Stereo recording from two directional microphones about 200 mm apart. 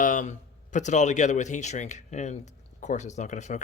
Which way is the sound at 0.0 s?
40° left (ahead or behind).